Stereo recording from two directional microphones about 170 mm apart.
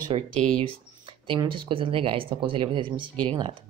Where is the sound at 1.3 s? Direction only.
30° right (ahead or behind).